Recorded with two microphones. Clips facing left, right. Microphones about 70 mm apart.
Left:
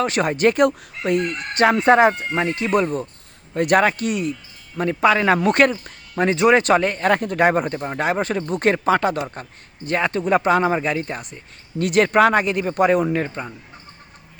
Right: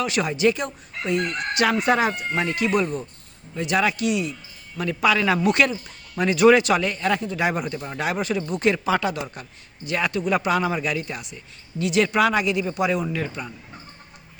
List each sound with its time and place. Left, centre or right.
0.0 s speech: left
1.5 s speech: left
3.5 s speech: left